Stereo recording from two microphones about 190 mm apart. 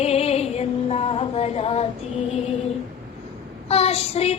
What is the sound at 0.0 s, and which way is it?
Music, 35° left (ahead or behind).